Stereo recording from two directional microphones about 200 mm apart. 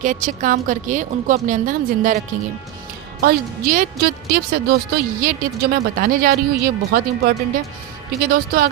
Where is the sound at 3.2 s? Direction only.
50° right (ahead or behind).